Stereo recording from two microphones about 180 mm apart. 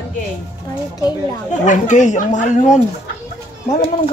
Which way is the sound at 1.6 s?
45° left (ahead or behind).